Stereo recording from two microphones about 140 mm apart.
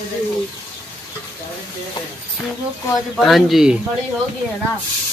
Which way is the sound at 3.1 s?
Centre (ahead or behind).